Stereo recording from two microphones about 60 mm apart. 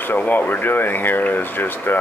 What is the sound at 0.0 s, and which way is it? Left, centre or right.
Speech, left.